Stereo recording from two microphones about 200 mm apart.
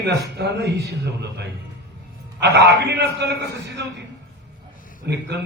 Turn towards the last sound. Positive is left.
turn(degrees=-55)  # may be behind; listen again after turning